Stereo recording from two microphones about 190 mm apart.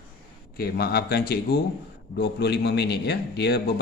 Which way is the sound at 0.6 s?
55° left (ahead or behind).